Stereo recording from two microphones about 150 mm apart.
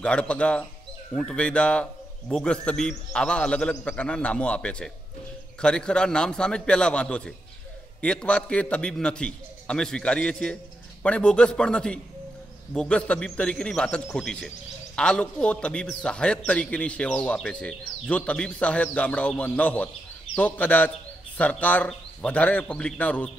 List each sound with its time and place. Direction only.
0.0 s a man's voice: 5° left (ahead or behind)